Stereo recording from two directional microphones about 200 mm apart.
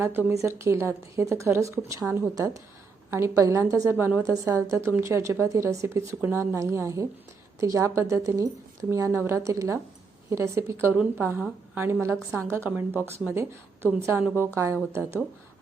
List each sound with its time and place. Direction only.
0.0 s a woman's voice: 10° right (ahead or behind)